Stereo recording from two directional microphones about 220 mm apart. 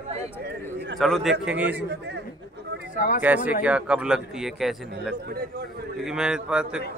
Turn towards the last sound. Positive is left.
turn(degrees=-5)  # may be behind; listen again after turning